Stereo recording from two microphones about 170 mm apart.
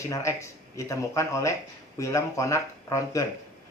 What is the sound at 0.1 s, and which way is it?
Speech, 15° left (ahead or behind).